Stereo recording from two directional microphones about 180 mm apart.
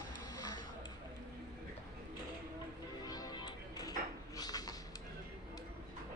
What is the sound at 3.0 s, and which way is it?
Music, 20° left (ahead or behind).